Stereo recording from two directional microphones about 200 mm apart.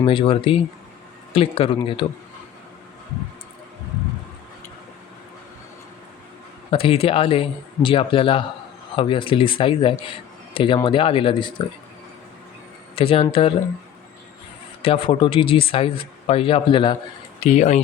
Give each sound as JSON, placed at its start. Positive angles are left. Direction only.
{"t": 0.0, "sound": "speech", "side_deg": 25}
{"t": 6.7, "sound": "speech", "side_deg": 25}
{"t": 13.0, "sound": "speech", "side_deg": 25}
{"t": 14.8, "sound": "speech", "side_deg": 25}